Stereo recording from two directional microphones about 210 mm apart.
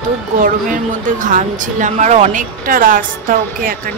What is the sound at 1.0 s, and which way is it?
Speech, 40° right (ahead or behind).